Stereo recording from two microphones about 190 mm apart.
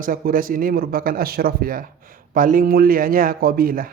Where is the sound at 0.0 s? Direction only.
45° right (ahead or behind).